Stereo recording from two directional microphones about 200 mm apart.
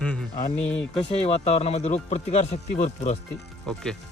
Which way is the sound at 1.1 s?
30° left (ahead or behind).